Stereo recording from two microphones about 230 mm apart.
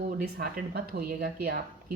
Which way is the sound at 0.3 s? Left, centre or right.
Right.